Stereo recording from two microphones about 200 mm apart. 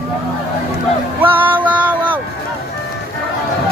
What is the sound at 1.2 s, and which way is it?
Music, 10° right (ahead or behind).